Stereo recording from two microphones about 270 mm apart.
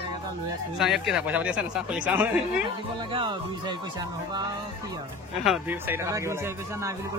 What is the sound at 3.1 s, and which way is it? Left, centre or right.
A man's voice, centre.